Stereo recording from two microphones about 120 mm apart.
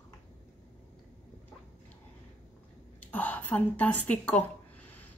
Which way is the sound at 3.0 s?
15° left (ahead or behind).